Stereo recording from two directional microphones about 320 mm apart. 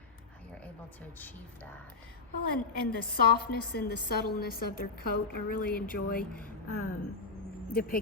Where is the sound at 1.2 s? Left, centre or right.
Centre.